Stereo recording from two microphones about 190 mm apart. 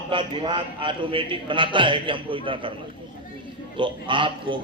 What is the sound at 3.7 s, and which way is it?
Speech, 25° right (ahead or behind).